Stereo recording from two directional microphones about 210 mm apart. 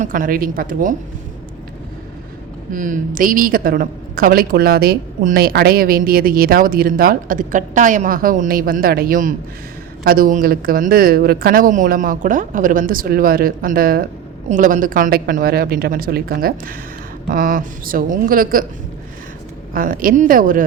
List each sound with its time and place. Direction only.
0.0 s a woman's voice: 40° right (ahead or behind)
2.7 s a woman's voice: 35° right (ahead or behind)
19.7 s a woman's voice: 40° right (ahead or behind)